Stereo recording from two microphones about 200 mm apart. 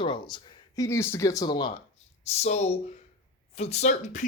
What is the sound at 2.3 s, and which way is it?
Speech, 30° left (ahead or behind).